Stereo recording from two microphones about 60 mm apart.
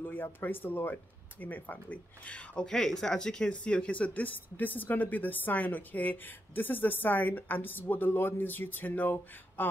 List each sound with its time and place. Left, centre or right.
0.0 s speech: left